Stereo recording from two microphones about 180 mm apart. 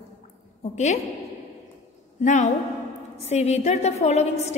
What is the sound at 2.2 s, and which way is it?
A woman's voice, 40° left (ahead or behind).